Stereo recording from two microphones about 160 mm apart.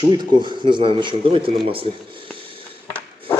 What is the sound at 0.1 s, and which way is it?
Speech, 30° right (ahead or behind).